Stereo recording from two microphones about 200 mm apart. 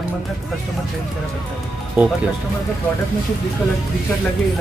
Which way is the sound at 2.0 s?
5° right (ahead or behind).